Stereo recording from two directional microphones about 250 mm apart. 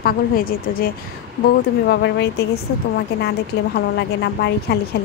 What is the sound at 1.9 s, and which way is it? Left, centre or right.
Speech, left.